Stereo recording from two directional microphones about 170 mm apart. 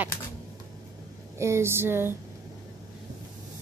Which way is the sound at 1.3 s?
15° right (ahead or behind).